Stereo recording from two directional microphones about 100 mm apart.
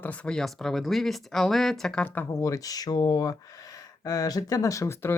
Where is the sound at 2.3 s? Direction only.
30° left (ahead or behind).